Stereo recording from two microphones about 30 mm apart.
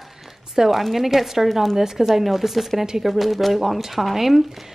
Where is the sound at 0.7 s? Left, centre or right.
Centre.